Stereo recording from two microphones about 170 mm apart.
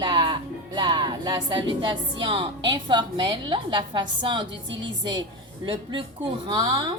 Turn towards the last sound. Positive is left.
turn(degrees=-25)  # may be behind; listen again after turning